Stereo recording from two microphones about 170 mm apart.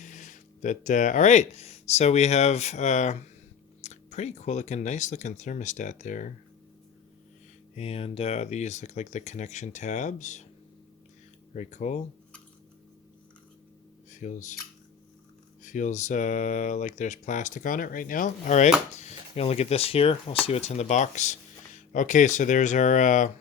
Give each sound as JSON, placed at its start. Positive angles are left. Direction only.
{"t": 0.0, "sound": "speech", "side_deg": 45}
{"t": 7.8, "sound": "speech", "side_deg": 35}
{"t": 11.5, "sound": "speech", "side_deg": 45}
{"t": 14.1, "sound": "speech", "side_deg": 45}
{"t": 15.6, "sound": "speech", "side_deg": 45}